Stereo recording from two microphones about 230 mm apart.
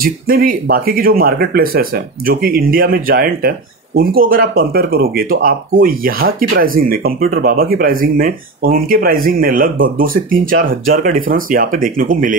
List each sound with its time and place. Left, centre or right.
0.0 s speech: right